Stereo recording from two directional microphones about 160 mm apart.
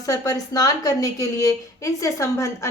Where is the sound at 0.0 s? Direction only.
20° left (ahead or behind).